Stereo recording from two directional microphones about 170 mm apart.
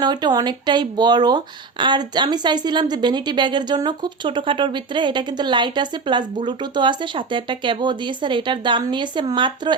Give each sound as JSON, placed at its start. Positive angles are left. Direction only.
{"t": 0.0, "sound": "a woman's voice", "side_deg": -25}